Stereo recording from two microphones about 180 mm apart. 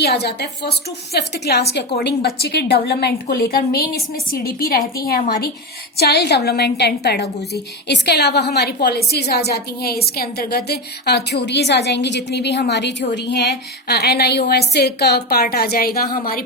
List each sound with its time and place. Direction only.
0.0 s a woman's voice: 65° left (ahead or behind)
6.0 s a woman's voice: 65° left (ahead or behind)